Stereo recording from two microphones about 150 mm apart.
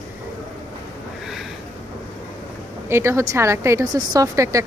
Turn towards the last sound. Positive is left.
turn(degrees=-20)  # may be behind; listen again after turning